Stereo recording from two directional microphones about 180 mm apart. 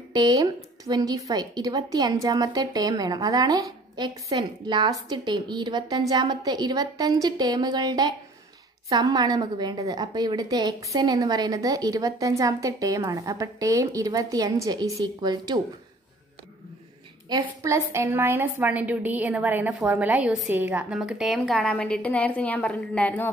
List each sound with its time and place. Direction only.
0.1 s a woman's voice: 25° right (ahead or behind)
17.3 s a woman's voice: 20° right (ahead or behind); by 23.3 s 10° left (ahead or behind)